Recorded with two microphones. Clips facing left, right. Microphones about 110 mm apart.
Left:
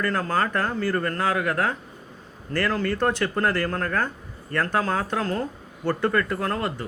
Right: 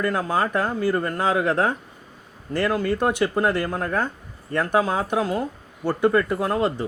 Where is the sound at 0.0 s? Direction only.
15° right (ahead or behind).